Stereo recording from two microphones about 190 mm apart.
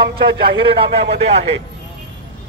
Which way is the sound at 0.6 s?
30° right (ahead or behind).